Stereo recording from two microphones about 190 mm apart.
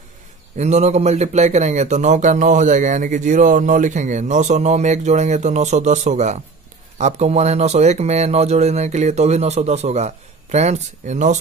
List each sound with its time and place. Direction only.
0.6 s speech: 35° right (ahead or behind)